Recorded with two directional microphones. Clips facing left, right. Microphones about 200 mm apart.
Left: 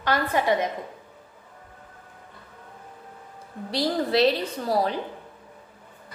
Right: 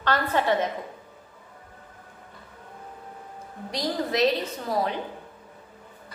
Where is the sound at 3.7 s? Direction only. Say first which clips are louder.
Left 3 dB; 30° left (ahead or behind).